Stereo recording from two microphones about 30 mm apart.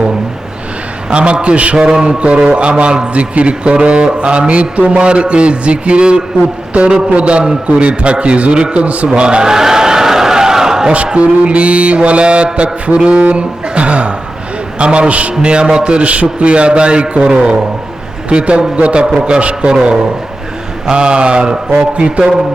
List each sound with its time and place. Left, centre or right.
1.1 s a man's voice: right
1.7 s mantra: right
2.0 s a man's voice: right
8.7 s mantra: right
9.1 s a man's voice: right
9.5 s crowd: centre
11.2 s mantra: right
14.8 s a man's voice: right
16.0 s a man's voice: right
18.8 s mantra: right
19.7 s a man's voice: right
21.9 s mantra: right